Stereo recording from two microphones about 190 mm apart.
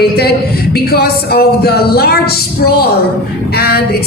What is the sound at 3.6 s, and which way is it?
Speech, 55° left (ahead or behind).